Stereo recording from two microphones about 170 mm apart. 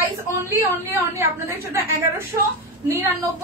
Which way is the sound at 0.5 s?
15° right (ahead or behind).